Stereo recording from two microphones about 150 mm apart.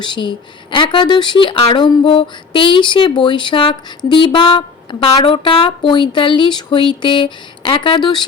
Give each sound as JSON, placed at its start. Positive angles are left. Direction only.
{"t": 0.0, "sound": "speech", "side_deg": 30}